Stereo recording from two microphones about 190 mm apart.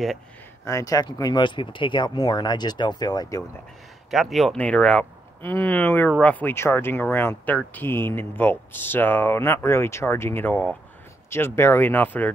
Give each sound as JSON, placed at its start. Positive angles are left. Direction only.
{"t": 0.7, "sound": "speech", "side_deg": 15}
{"t": 4.1, "sound": "speech", "side_deg": 0}